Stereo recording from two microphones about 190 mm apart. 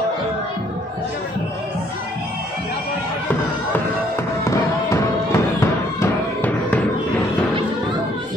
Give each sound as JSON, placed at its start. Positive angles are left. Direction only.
{"t": 4.5, "sound": "music", "side_deg": 15}